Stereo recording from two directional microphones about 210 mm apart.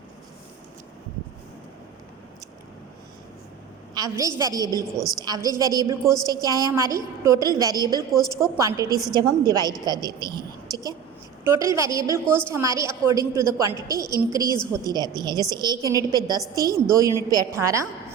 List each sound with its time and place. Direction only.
3.9 s a woman's voice: 15° right (ahead or behind)
4.9 s a woman's voice: centre (ahead or behind)
5.2 s a woman's voice: 15° right (ahead or behind)
8.1 s a woman's voice: centre (ahead or behind)
8.5 s a woman's voice: 15° right (ahead or behind)